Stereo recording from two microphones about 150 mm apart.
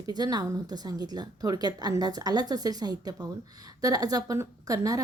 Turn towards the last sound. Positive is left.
turn(degrees=-25)  # may be behind; listen again after turning